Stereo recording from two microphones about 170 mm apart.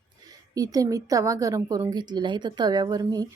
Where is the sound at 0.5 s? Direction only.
20° right (ahead or behind).